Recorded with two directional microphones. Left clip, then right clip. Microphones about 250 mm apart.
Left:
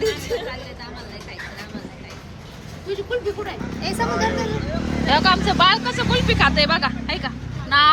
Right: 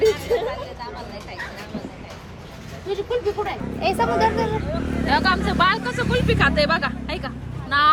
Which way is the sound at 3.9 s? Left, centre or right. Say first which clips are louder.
Right 1 dB; right.